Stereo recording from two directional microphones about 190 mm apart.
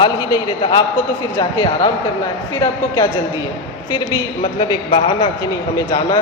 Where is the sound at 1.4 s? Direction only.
20° left (ahead or behind).